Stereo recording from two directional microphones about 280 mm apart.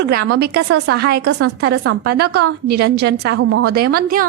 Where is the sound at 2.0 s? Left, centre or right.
Right.